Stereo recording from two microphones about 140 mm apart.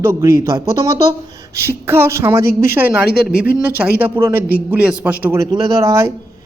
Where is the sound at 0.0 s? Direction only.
20° right (ahead or behind).